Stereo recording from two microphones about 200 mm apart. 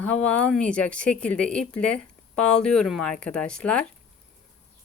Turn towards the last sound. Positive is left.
turn(degrees=5)  # may be behind; listen again after turning